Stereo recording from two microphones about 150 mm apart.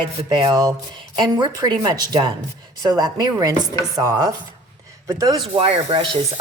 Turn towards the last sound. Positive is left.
turn(degrees=-35)  # may be behind; listen again after turning